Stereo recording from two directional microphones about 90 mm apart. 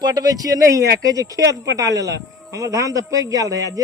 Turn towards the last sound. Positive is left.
turn(degrees=-40)  # may be behind; listen again after turning